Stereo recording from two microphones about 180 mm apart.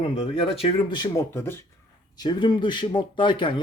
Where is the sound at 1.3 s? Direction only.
15° left (ahead or behind).